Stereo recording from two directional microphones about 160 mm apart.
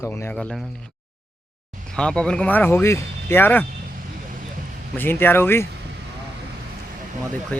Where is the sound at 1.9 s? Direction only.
5° left (ahead or behind).